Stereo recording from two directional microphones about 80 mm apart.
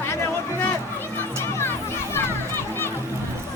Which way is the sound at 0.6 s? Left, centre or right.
Left.